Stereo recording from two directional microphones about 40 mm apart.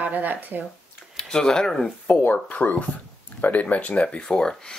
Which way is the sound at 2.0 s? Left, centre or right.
Left.